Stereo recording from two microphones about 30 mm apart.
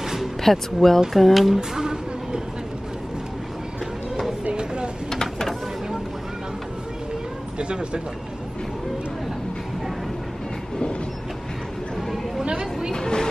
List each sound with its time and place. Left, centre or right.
0.4 s speech: centre
1.6 s music: right
5.1 s a sound: centre
7.5 s speech: right
12.9 s speech: left